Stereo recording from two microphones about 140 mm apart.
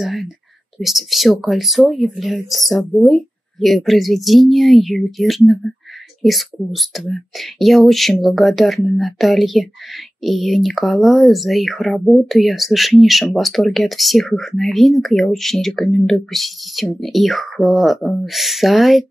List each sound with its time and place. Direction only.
0.0 s speech: centre (ahead or behind)